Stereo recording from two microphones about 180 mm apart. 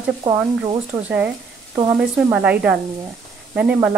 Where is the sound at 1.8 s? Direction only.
5° right (ahead or behind).